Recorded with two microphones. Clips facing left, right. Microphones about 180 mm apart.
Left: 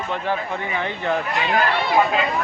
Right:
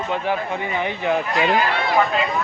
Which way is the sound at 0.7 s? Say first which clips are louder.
Right 2 dB; 15° right (ahead or behind).